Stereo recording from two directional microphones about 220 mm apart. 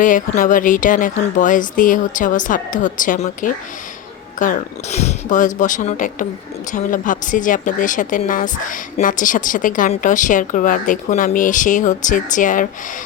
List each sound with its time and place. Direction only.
0.0 s a woman's voice: 35° left (ahead or behind)